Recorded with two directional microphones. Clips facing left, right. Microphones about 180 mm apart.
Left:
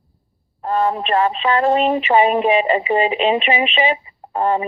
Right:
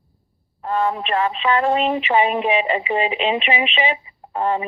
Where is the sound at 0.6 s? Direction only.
40° left (ahead or behind).